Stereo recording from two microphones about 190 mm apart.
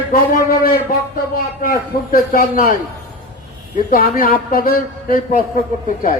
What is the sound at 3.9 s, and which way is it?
A man's voice, 50° left (ahead or behind).